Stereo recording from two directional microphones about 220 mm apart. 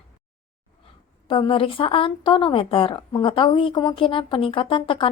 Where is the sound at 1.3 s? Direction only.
25° left (ahead or behind).